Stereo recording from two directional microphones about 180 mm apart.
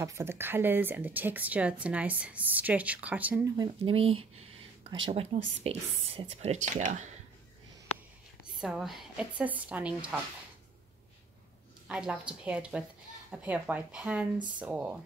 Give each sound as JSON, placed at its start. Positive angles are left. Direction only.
{"t": 0.0, "sound": "speech", "side_deg": -15}
{"t": 3.5, "sound": "speech", "side_deg": -25}
{"t": 8.5, "sound": "speech", "side_deg": -5}
{"t": 11.9, "sound": "a woman's voice", "side_deg": -5}